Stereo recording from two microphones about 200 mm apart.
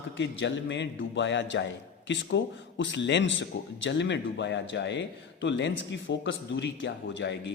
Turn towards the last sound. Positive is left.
turn(degrees=60)  # may be behind; listen again after turning